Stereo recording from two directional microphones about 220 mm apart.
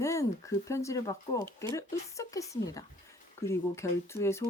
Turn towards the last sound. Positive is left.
turn(degrees=10)  # may be behind; listen again after turning